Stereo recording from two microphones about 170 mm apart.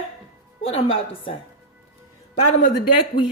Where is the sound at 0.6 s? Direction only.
35° left (ahead or behind).